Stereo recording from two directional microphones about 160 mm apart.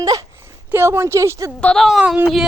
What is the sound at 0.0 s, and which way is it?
Speech, 20° right (ahead or behind).